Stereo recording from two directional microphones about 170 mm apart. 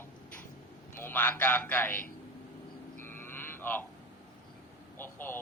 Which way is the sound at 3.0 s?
10° left (ahead or behind).